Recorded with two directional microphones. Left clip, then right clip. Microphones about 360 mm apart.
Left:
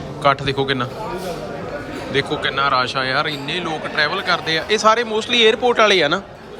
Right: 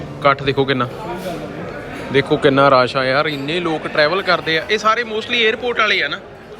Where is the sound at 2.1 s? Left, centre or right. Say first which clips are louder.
Right 6 dB; centre.